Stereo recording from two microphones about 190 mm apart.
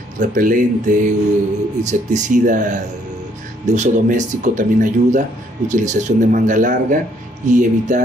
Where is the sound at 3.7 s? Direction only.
40° right (ahead or behind).